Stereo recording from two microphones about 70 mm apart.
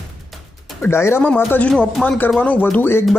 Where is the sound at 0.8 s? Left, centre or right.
Left.